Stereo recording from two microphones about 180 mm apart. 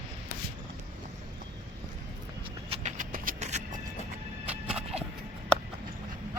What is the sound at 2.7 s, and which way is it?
Vehicle, 40° right (ahead or behind).